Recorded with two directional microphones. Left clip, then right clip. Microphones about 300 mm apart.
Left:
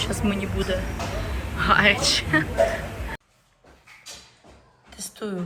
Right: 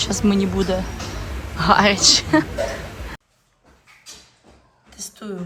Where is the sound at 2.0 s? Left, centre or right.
Centre.